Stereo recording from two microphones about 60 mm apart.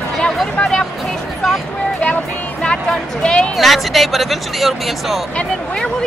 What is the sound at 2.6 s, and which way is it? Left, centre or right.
Speech, centre.